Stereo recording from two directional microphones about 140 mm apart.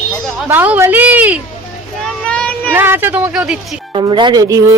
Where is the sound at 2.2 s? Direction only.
10° left (ahead or behind).